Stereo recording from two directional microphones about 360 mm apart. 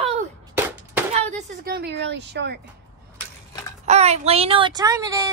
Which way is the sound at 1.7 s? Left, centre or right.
Right.